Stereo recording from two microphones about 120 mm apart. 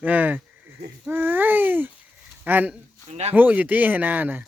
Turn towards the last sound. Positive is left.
turn(degrees=-15)  # may be behind; listen again after turning